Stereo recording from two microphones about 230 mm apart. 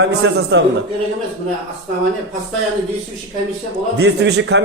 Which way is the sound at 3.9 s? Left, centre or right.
Right.